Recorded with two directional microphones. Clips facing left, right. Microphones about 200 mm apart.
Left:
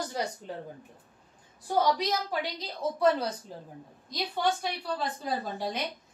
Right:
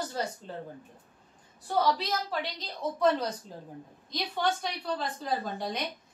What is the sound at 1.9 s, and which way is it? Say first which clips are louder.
A woman's voice: left 2 dB; 10° left (ahead or behind).